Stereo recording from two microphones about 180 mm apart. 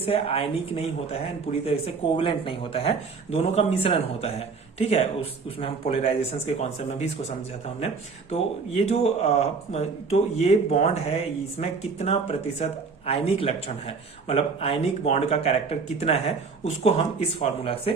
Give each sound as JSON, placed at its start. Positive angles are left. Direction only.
{"t": 0.0, "sound": "speech", "side_deg": 30}